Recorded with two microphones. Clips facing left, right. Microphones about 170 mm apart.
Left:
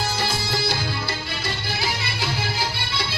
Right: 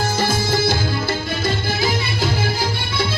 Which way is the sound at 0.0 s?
45° right (ahead or behind).